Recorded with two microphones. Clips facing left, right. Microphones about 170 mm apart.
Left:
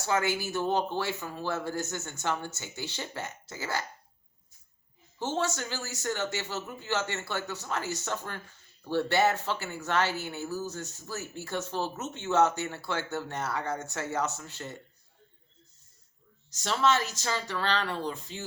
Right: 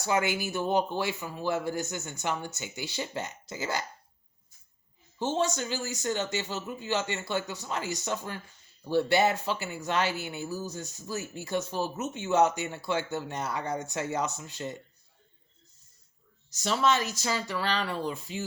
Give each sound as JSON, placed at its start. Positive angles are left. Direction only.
{"t": 0.0, "sound": "speech", "side_deg": -15}
{"t": 5.2, "sound": "speech", "side_deg": -15}
{"t": 16.5, "sound": "speech", "side_deg": -10}